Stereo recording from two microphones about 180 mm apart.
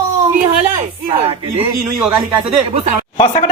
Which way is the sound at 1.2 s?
30° right (ahead or behind).